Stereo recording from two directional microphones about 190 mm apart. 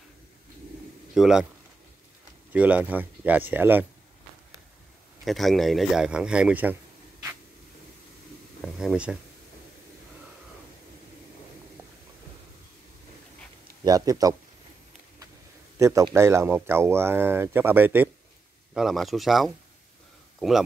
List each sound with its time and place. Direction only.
1.1 s a man's voice: 5° right (ahead or behind)
2.5 s speech: 5° right (ahead or behind)
5.2 s a man's voice: centre (ahead or behind)
8.5 s speech: centre (ahead or behind)
13.8 s speech: 20° right (ahead or behind)
15.8 s a man's voice: 15° right (ahead or behind); by 20.6 s centre (ahead or behind)